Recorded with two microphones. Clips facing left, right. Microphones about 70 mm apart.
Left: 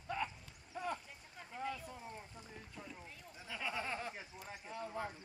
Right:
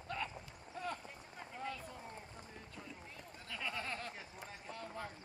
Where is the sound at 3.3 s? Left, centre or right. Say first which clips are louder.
Left 2 dB; centre.